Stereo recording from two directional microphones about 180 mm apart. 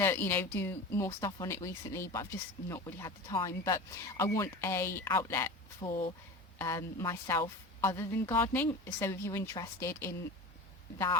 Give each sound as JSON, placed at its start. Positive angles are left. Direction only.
{"t": 0.0, "sound": "a woman's voice", "side_deg": 15}